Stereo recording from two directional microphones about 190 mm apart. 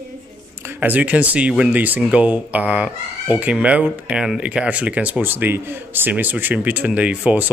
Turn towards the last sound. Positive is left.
turn(degrees=-10)  # may be behind; listen again after turning